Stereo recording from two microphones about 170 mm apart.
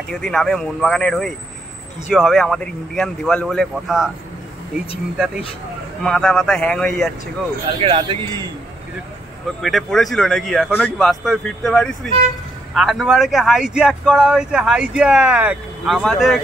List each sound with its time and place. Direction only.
0.1 s speech: 5° left (ahead or behind)
6.0 s speech: centre (ahead or behind)
7.6 s a man's voice: 35° right (ahead or behind)
9.6 s speech: centre (ahead or behind)